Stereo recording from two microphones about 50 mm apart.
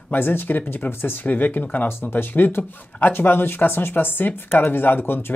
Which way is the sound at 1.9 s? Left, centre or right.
Left.